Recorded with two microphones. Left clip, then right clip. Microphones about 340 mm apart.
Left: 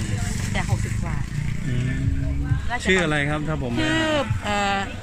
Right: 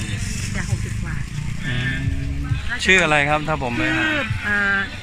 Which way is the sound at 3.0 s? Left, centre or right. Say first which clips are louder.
Right 7 dB; centre.